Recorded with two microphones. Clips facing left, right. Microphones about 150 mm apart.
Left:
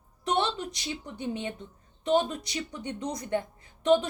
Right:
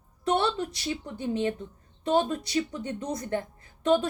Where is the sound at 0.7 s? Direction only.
20° left (ahead or behind).